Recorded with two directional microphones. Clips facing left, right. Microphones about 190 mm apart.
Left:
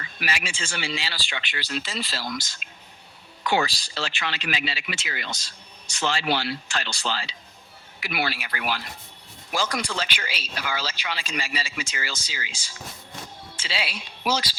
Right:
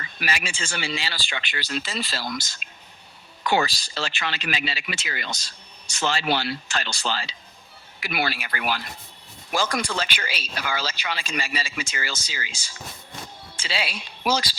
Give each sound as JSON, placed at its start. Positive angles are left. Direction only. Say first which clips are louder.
{"t": 0.2, "sound": "a woman's voice", "louder": "right 1 dB", "side_deg": -45}